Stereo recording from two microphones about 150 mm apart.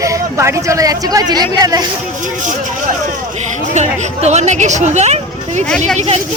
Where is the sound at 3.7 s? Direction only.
50° right (ahead or behind).